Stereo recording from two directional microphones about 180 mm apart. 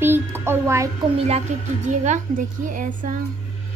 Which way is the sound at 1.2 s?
35° right (ahead or behind).